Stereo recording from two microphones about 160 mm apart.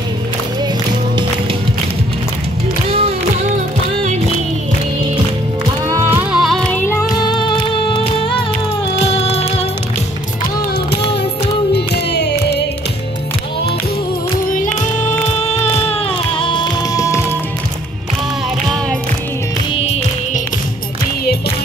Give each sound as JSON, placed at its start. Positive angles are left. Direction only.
{"t": 2.9, "sound": "music", "side_deg": -40}
{"t": 5.9, "sound": "music", "side_deg": -15}
{"t": 6.4, "sound": "music", "side_deg": 0}
{"t": 6.8, "sound": "music", "side_deg": 20}
{"t": 11.7, "sound": "music", "side_deg": 90}
{"t": 14.8, "sound": "music", "side_deg": 50}
{"t": 19.8, "sound": "music", "side_deg": 40}